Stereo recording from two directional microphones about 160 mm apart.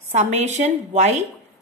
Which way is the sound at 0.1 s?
45° right (ahead or behind).